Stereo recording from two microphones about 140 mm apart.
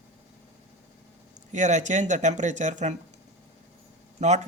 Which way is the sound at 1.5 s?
60° right (ahead or behind).